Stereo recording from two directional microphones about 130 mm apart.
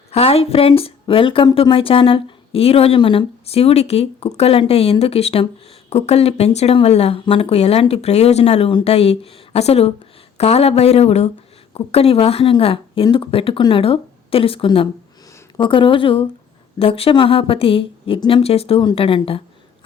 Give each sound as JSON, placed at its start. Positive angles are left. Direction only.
{"t": 0.1, "sound": "a woman's voice", "side_deg": 50}
{"t": 18.4, "sound": "speech", "side_deg": 50}
{"t": 18.8, "sound": "speech", "side_deg": 40}